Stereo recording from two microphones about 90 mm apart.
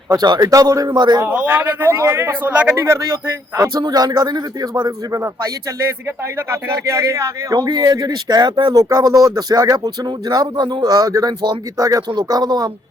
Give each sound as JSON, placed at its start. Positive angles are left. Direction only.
{"t": 0.2, "sound": "speech", "side_deg": -45}
{"t": 1.2, "sound": "speech", "side_deg": -20}
{"t": 2.7, "sound": "speech", "side_deg": -30}
{"t": 6.5, "sound": "speech", "side_deg": -30}